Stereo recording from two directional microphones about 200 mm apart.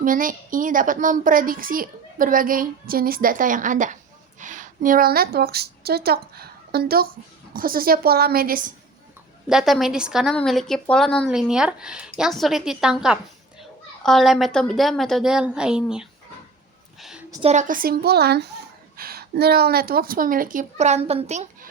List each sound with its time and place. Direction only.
0.0 s a woman's voice: 45° right (ahead or behind)
9.5 s a woman's voice: centre (ahead or behind)
17.0 s a sound: centre (ahead or behind)
17.4 s a woman's voice: 35° right (ahead or behind)